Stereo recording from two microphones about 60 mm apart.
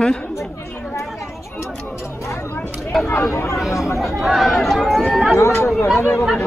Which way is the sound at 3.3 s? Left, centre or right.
Left.